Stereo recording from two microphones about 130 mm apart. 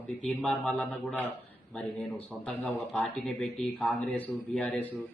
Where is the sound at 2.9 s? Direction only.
5° left (ahead or behind).